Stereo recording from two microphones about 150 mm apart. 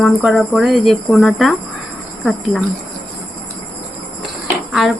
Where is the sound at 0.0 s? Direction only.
Centre (ahead or behind).